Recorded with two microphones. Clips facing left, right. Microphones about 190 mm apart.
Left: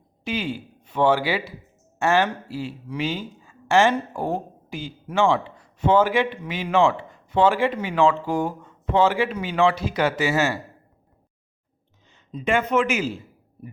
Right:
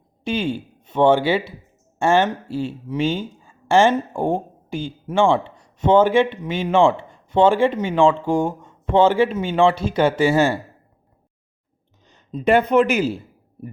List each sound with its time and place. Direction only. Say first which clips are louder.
0.3 s speech: right 5 dB; 25° right (ahead or behind)
12.0 s speech: right 7 dB; 40° right (ahead or behind)